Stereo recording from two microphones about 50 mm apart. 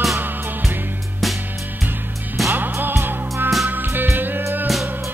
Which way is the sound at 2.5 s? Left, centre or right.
Right.